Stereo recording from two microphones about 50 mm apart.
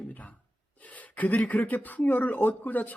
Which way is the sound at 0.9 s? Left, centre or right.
Left.